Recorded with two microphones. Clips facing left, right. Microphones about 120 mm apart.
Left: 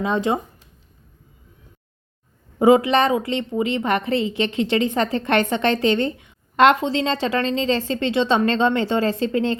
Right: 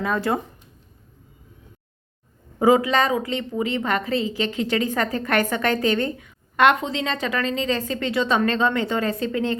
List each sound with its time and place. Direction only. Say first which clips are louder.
0.0 s speech: left 2 dB; 20° left (ahead or behind)
2.6 s speech: left 3 dB; 25° left (ahead or behind)